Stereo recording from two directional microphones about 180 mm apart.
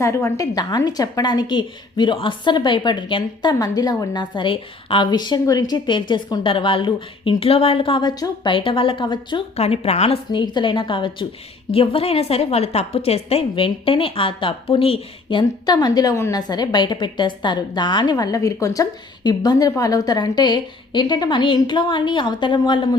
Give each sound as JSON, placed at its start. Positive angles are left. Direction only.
{"t": 0.0, "sound": "a woman's voice", "side_deg": 15}